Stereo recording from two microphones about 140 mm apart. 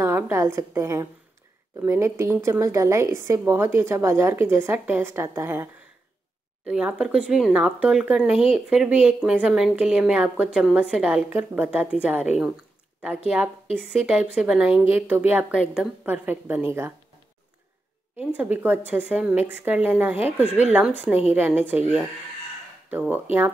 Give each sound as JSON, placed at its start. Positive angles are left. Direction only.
{"t": 0.0, "sound": "a woman's voice", "side_deg": -15}
{"t": 6.6, "sound": "speech", "side_deg": -5}
{"t": 18.1, "sound": "speech", "side_deg": -10}
{"t": 20.4, "sound": "a woman's voice", "side_deg": -50}
{"t": 20.7, "sound": "speech", "side_deg": -10}
{"t": 22.8, "sound": "speech", "side_deg": -15}